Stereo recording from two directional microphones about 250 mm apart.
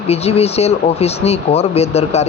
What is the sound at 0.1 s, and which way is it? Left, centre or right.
Speech, left.